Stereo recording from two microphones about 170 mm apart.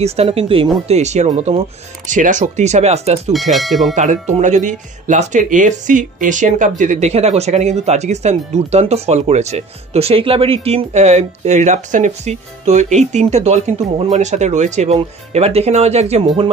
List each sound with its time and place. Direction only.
0.0 s speech: 35° right (ahead or behind)
3.5 s speech: centre (ahead or behind)
3.9 s speech: 45° right (ahead or behind)